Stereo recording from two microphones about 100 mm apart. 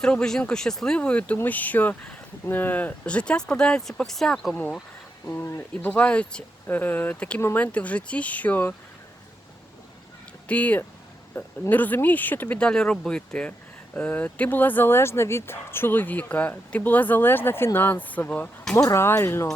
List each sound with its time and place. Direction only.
0.0 s speech: 5° left (ahead or behind)
5.2 s speech: 25° left (ahead or behind)
5.9 s speech: 15° left (ahead or behind)
10.5 s speech: 15° left (ahead or behind)
18.8 s speech: 30° left (ahead or behind)